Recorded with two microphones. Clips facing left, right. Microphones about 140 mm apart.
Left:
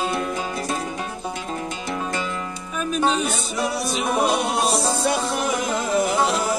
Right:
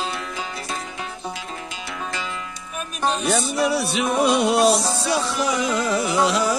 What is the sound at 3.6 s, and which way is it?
Music, 70° right (ahead or behind).